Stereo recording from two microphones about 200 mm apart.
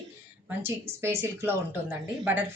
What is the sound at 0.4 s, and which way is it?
A woman's voice, 10° right (ahead or behind).